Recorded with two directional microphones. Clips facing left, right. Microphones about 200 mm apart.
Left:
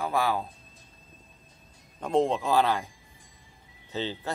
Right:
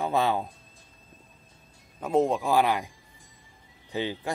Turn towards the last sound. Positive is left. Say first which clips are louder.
# right 2 dB
turn(degrees=-15)  # may be behind; listen again after turning